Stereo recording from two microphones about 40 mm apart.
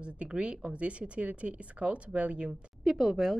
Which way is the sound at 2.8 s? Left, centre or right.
Centre.